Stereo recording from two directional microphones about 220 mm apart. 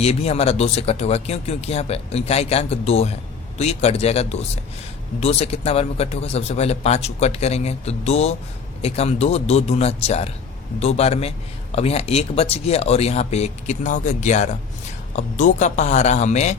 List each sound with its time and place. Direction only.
0.0 s a man's voice: 30° left (ahead or behind)